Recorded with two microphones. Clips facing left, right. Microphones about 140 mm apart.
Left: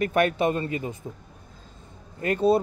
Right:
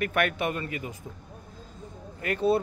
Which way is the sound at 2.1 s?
30° left (ahead or behind).